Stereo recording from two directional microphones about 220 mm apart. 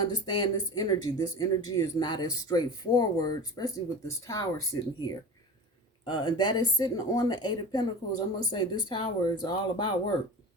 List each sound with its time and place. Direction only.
0.0 s speech: 20° left (ahead or behind)